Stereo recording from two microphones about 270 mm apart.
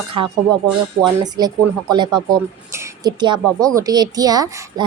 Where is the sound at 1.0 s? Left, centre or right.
Centre.